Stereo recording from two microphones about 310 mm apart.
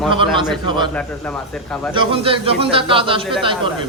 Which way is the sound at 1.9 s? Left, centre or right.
Centre.